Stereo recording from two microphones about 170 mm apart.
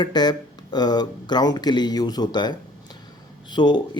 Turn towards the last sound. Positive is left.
turn(degrees=25)  # may be behind; listen again after turning